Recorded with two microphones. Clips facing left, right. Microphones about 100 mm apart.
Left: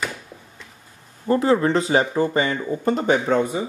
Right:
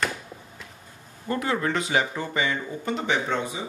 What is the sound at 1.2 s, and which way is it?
Speech, 30° left (ahead or behind).